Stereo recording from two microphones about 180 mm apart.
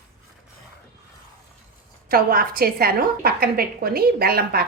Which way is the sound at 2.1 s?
55° right (ahead or behind).